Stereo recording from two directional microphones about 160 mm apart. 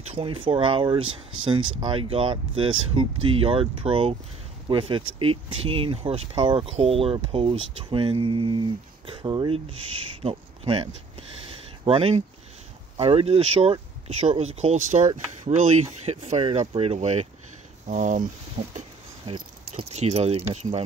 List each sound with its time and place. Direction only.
0.2 s speech: 35° right (ahead or behind); by 18.2 s 50° right (ahead or behind)
19.3 s speech: 35° right (ahead or behind)